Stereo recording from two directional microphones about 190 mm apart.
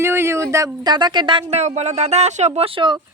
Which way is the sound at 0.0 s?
15° right (ahead or behind).